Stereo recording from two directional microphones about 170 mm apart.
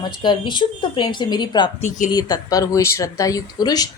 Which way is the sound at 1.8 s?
45° left (ahead or behind).